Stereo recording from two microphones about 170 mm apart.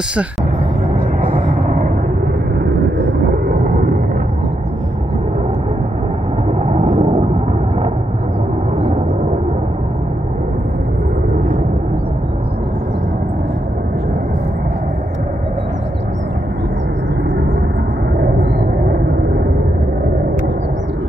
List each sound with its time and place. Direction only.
3.6 s vehicle: 50° right (ahead or behind)
6.6 s vehicle: 40° right (ahead or behind)